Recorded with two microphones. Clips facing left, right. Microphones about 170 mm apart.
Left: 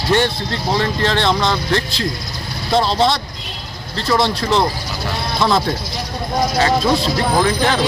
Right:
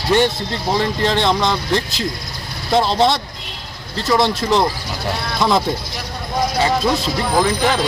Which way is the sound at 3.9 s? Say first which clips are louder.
Even; centre (ahead or behind).